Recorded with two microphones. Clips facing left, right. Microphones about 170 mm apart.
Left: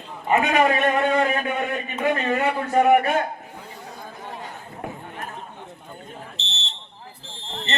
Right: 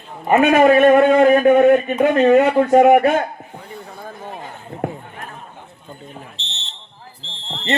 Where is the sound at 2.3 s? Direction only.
60° right (ahead or behind).